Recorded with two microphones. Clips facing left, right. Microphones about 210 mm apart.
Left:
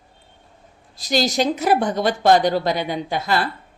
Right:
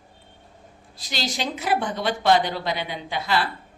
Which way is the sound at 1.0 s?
40° left (ahead or behind).